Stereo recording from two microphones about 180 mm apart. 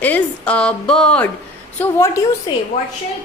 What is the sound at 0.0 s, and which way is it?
A woman's voice, 5° left (ahead or behind).